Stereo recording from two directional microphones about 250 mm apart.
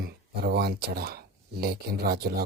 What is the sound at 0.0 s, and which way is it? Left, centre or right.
Speech, right.